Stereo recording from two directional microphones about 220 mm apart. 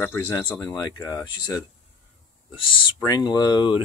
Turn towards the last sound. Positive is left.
turn(degrees=20)  # may be behind; listen again after turning